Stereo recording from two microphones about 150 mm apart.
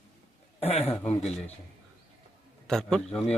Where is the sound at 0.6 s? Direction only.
40° left (ahead or behind).